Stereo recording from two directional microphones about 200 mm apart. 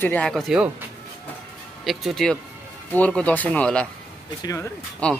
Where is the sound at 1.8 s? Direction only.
Centre (ahead or behind).